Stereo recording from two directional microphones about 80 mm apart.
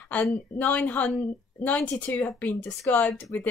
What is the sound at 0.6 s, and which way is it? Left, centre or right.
A woman's voice, left.